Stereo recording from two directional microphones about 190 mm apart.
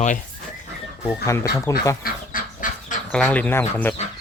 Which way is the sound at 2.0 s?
45° left (ahead or behind).